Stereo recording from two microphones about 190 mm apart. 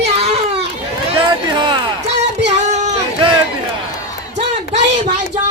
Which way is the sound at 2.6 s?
35° right (ahead or behind).